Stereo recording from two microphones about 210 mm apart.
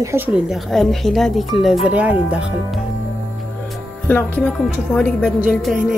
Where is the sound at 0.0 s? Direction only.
10° right (ahead or behind).